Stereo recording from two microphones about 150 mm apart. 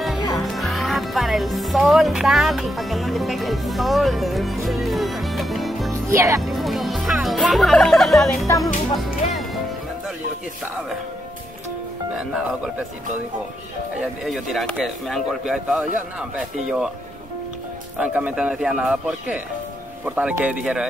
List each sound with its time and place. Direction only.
0.4 s speech: centre (ahead or behind)
6.0 s speech: 20° right (ahead or behind)
6.4 s music: centre (ahead or behind)
8.5 s music: 15° left (ahead or behind)
12.2 s speech: 5° right (ahead or behind)
14.2 s speech: centre (ahead or behind)
17.9 s speech: 10° right (ahead or behind)